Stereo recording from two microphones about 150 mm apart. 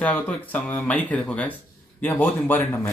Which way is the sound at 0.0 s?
10° left (ahead or behind).